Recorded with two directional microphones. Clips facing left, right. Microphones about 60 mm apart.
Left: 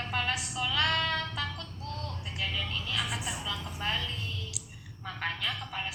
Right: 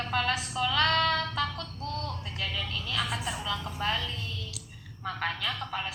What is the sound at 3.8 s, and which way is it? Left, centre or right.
A woman's voice, centre.